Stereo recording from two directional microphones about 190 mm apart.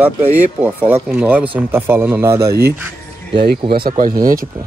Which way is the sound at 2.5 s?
55° right (ahead or behind).